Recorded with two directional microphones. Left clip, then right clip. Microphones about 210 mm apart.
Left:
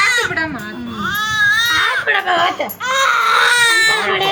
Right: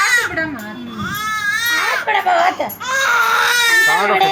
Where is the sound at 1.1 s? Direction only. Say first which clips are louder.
Left 5 dB; 10° left (ahead or behind).